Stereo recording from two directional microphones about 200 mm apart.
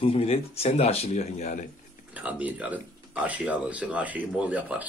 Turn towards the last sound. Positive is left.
turn(degrees=-5)  # may be behind; listen again after turning